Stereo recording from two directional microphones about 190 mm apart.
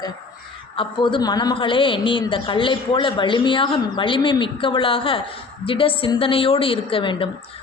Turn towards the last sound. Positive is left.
turn(degrees=25)  # may be behind; listen again after turning